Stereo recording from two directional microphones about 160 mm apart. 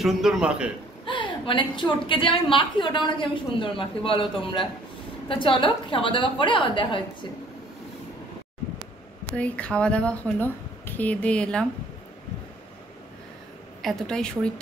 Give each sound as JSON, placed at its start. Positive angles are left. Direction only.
{"t": 0.0, "sound": "a man's voice", "side_deg": 0}
{"t": 1.0, "sound": "a woman's voice", "side_deg": 30}
{"t": 9.3, "sound": "speech", "side_deg": 5}
{"t": 13.8, "sound": "a man's voice", "side_deg": 5}